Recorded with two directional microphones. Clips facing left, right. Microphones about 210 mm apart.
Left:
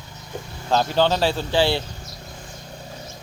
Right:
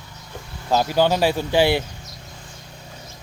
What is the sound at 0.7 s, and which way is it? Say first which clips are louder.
Speech: right 1 dB; 10° right (ahead or behind).